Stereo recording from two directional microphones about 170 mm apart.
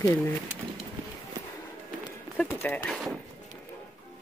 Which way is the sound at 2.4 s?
10° left (ahead or behind).